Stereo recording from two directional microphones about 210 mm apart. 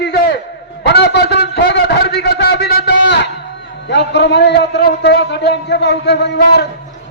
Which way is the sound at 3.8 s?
55° left (ahead or behind).